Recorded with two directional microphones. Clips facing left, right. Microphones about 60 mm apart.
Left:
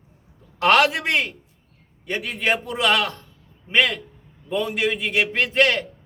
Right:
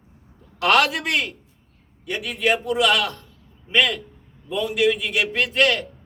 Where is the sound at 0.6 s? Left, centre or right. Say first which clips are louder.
Left 1 dB; left.